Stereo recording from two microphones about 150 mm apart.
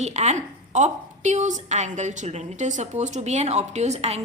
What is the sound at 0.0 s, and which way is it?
A woman's voice, 50° right (ahead or behind).